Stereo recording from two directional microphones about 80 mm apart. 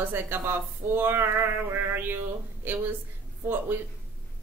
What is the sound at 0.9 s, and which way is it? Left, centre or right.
A woman's voice, right.